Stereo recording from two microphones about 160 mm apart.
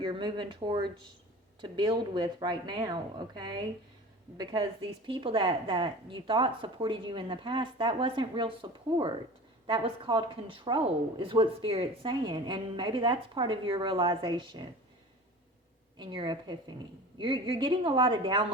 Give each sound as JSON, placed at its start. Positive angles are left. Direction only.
{"t": 0.0, "sound": "speech", "side_deg": -30}
{"t": 5.0, "sound": "speech", "side_deg": -30}
{"t": 16.0, "sound": "speech", "side_deg": -30}